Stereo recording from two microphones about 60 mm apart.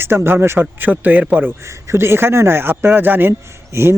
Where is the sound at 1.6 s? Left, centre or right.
Right.